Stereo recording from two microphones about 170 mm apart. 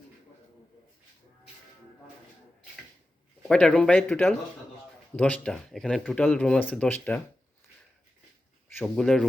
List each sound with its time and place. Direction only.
3.5 s speech: 5° left (ahead or behind)
8.8 s speech: 5° left (ahead or behind)